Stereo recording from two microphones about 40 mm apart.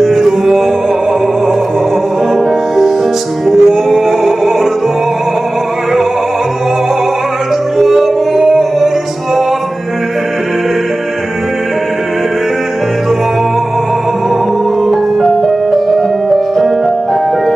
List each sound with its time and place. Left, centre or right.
0.0 s music: centre
3.4 s music: centre
7.7 s music: centre
14.9 s music: centre